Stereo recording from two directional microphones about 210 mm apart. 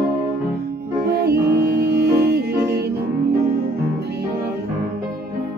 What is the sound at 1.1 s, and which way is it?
Music, 50° right (ahead or behind).